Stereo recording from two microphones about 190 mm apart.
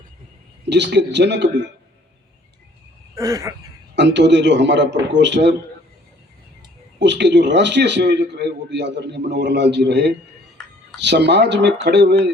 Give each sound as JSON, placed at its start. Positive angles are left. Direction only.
{"t": 0.7, "sound": "a man's voice", "side_deg": -65}
{"t": 3.2, "sound": "a sound", "side_deg": -15}
{"t": 3.9, "sound": "a man's voice", "side_deg": -70}
{"t": 7.0, "sound": "a man's voice", "side_deg": -65}
{"t": 10.6, "sound": "a sound", "side_deg": 5}
{"t": 11.0, "sound": "a man's voice", "side_deg": -65}